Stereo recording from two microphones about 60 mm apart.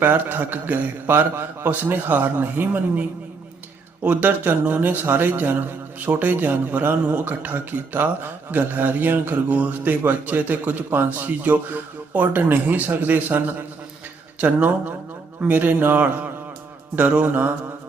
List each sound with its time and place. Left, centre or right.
0.0 s a man's voice: right
4.1 s a man's voice: right